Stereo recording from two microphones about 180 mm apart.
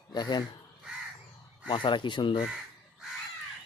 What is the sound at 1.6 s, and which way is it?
Speech, 25° left (ahead or behind).